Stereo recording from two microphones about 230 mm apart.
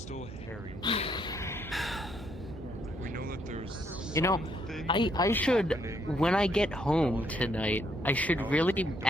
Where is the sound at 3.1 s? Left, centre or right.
Right.